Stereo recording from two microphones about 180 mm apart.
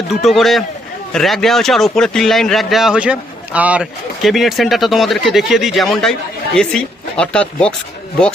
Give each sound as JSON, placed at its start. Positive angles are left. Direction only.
{"t": 0.1, "sound": "a man's voice", "side_deg": 0}